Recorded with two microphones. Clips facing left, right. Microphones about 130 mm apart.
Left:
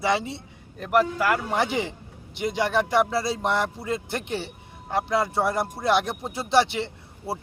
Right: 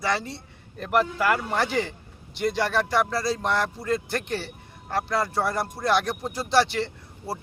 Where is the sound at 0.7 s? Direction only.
5° left (ahead or behind).